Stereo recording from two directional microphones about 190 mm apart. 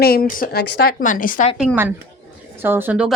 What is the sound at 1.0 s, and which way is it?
Speech, 45° left (ahead or behind).